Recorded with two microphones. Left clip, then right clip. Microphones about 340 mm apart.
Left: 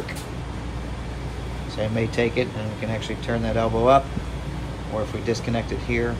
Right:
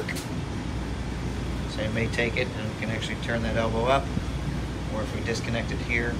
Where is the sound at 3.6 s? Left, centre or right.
Centre.